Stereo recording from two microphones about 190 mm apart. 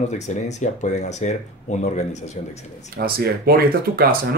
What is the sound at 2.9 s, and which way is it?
Speech, 55° right (ahead or behind).